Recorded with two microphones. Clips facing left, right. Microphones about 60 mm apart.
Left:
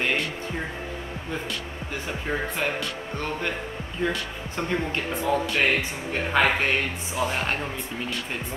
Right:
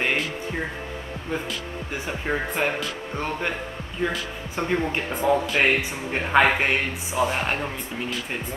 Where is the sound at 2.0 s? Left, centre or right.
Centre.